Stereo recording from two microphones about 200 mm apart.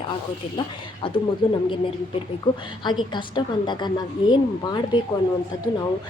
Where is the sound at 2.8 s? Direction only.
25° left (ahead or behind).